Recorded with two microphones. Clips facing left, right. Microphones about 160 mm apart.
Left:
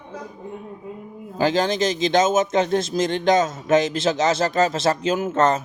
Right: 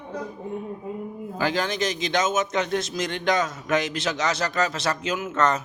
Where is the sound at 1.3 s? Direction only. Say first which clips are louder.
Left 6 dB; 30° left (ahead or behind).